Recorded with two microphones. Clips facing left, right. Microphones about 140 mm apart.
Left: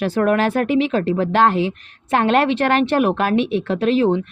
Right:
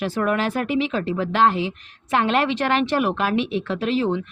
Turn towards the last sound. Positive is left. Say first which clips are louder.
# left 5 dB
turn(degrees=50)  # may be behind; listen again after turning